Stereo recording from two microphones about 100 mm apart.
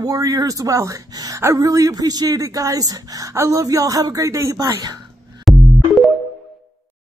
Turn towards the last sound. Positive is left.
turn(degrees=0)  # may be behind; listen again after turning